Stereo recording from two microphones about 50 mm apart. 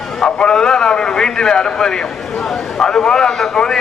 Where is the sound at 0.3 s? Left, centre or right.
Centre.